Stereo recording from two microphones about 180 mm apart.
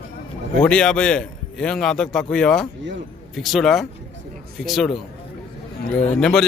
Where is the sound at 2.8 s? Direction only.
75° right (ahead or behind).